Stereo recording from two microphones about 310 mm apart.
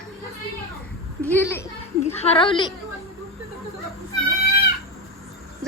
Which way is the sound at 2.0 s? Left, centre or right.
Centre.